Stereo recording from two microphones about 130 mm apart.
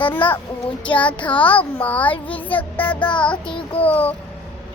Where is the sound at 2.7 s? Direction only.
15° left (ahead or behind).